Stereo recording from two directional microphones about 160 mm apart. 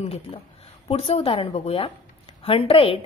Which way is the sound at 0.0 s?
40° left (ahead or behind).